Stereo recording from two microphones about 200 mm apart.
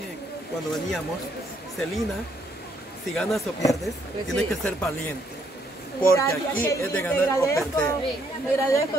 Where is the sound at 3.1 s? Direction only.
Centre (ahead or behind).